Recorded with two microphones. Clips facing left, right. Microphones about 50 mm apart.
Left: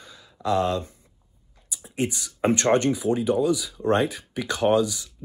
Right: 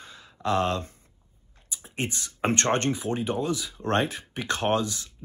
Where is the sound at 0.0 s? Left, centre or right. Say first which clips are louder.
Left 1 dB; right.